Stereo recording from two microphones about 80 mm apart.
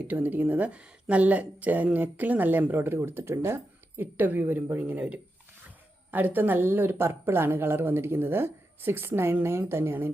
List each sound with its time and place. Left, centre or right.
0.1 s speech: right